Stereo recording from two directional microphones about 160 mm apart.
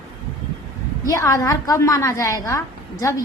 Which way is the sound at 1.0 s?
20° left (ahead or behind).